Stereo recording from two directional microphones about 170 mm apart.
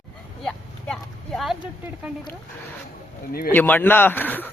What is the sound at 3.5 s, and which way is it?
Speech, 10° left (ahead or behind).